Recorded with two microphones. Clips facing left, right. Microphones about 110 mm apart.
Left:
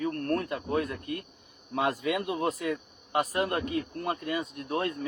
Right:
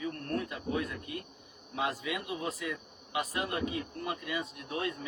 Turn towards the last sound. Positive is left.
turn(degrees=50)  # may be behind; listen again after turning